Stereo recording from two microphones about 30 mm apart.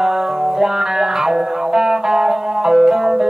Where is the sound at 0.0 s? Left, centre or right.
Centre.